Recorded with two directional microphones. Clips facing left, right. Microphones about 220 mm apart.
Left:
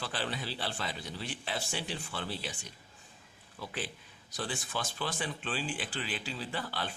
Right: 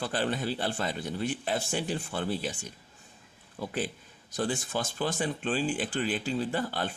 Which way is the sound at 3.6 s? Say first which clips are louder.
Right 7 dB; 45° right (ahead or behind).